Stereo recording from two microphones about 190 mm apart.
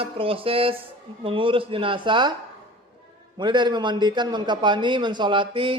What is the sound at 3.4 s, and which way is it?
A man's voice, 25° right (ahead or behind).